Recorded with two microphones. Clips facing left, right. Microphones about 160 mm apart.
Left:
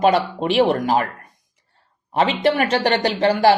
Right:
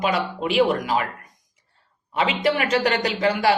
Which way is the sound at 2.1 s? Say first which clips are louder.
Left 4 dB; 35° left (ahead or behind).